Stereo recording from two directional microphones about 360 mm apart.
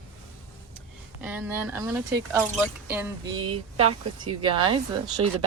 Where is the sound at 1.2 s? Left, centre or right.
Centre.